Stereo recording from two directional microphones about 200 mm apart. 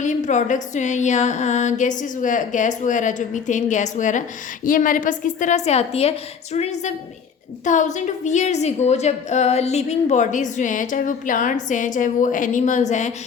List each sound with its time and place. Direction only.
0.0 s a woman's voice: 35° left (ahead or behind)